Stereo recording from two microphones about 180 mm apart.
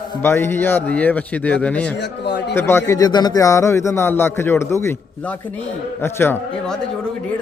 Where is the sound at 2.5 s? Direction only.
15° left (ahead or behind).